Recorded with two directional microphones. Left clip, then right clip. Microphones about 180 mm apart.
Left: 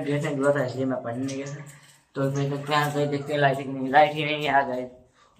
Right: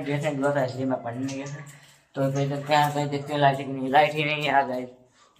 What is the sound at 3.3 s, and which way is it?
A man's voice, 20° right (ahead or behind).